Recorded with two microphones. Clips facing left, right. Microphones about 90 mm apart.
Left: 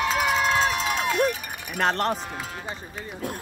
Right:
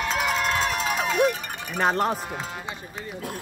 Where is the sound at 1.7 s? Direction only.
5° right (ahead or behind).